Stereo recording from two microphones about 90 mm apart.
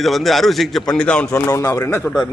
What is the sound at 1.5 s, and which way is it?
Speech, 35° left (ahead or behind).